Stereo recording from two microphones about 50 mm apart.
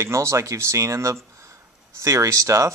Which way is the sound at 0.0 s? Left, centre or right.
Right.